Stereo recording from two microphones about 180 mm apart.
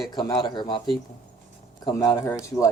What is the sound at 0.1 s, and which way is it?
Speech, 25° left (ahead or behind).